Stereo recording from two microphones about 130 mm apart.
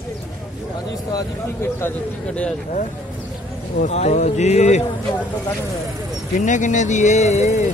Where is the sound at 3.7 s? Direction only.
65° left (ahead or behind).